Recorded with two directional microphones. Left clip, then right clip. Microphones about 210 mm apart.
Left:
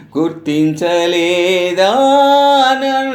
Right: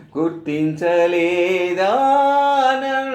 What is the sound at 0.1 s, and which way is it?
Music, 30° left (ahead or behind).